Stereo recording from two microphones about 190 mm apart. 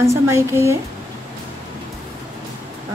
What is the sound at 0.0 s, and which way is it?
Speech, 15° right (ahead or behind).